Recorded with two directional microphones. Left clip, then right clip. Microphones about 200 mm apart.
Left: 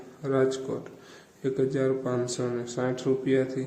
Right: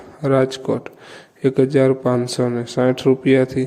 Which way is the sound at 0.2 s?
40° right (ahead or behind).